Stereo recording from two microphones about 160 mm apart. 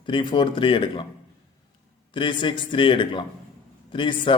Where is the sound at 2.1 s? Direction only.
30° left (ahead or behind).